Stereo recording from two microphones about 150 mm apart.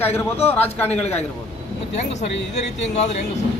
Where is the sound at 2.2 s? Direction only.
50° left (ahead or behind).